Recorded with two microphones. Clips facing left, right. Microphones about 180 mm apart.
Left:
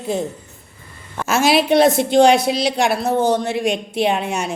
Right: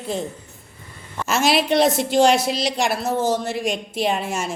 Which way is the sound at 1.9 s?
55° left (ahead or behind).